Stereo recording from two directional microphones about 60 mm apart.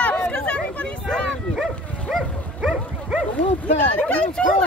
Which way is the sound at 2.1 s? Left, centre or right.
Centre.